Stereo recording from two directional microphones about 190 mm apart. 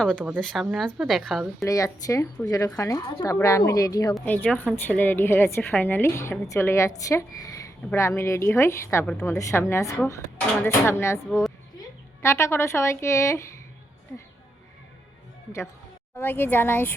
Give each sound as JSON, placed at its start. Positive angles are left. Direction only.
{"t": 0.0, "sound": "a woman's voice", "side_deg": 5}
{"t": 1.6, "sound": "a woman's voice", "side_deg": 20}
{"t": 4.1, "sound": "a woman's voice", "side_deg": 5}
{"t": 9.0, "sound": "a woman's voice", "side_deg": 5}
{"t": 9.3, "sound": "a woman's voice", "side_deg": 15}
{"t": 16.1, "sound": "a woman's voice", "side_deg": 10}